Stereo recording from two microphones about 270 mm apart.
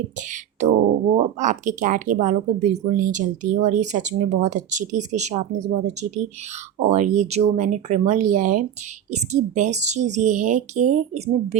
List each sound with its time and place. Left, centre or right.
0.2 s speech: right